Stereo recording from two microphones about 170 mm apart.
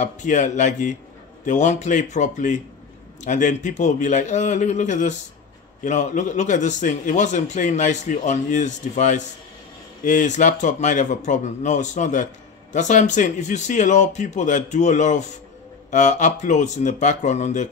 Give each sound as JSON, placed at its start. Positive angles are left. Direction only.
{"t": 0.0, "sound": "a man's voice", "side_deg": 45}